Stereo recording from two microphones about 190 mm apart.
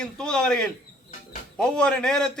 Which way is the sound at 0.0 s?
5° left (ahead or behind).